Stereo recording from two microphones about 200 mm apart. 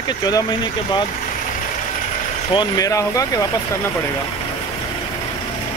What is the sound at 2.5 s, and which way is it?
Speech, 20° left (ahead or behind).